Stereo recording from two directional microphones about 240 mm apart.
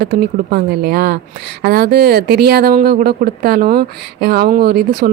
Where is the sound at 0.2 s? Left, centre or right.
Right.